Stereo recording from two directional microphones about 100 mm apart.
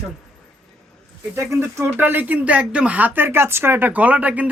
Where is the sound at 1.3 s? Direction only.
25° right (ahead or behind).